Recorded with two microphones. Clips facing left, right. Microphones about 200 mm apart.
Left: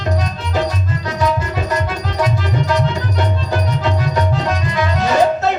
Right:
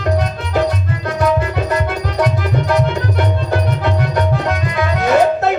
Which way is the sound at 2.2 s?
60° right (ahead or behind).